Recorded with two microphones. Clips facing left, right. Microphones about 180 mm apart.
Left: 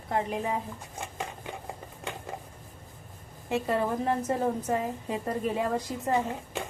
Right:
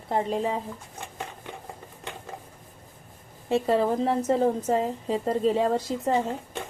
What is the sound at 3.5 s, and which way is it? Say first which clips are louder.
A woman's voice: right 5 dB; 30° right (ahead or behind).